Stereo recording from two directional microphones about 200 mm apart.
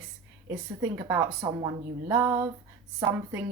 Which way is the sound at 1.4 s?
15° right (ahead or behind).